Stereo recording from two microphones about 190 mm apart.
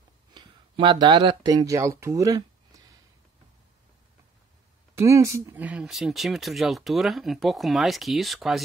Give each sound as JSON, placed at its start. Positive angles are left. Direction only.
{"t": 0.3, "sound": "speech", "side_deg": -25}
{"t": 4.9, "sound": "speech", "side_deg": -15}